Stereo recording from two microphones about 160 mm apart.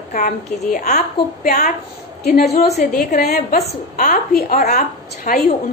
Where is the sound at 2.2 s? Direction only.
80° left.